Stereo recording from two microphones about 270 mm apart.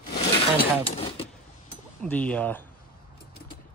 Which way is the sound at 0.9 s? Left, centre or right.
Left.